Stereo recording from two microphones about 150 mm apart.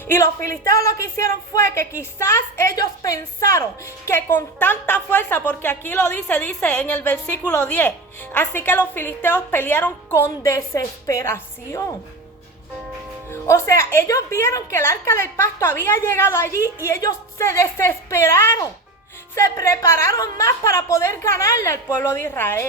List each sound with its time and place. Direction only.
0.1 s a woman's voice: 15° left (ahead or behind)
13.3 s a woman's voice: 20° left (ahead or behind)